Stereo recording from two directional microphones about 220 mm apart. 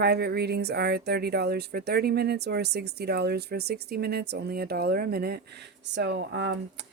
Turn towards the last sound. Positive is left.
turn(degrees=-55)  # may be behind; listen again after turning